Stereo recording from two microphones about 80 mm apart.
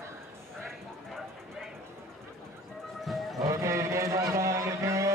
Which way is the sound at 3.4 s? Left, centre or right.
Right.